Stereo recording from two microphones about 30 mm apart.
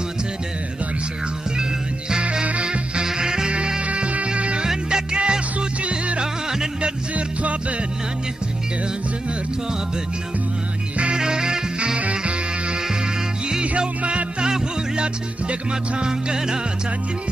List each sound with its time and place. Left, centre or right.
1.6 s music: right
3.1 s music: right
3.8 s music: right
6.8 s music: right
11.1 s music: right
12.0 s music: right
16.0 s music: right